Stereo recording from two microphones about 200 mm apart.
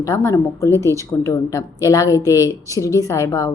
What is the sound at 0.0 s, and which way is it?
A woman's voice, 15° left (ahead or behind).